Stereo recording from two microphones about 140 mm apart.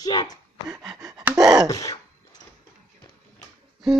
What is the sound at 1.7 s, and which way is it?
Throat clearing, 25° left (ahead or behind).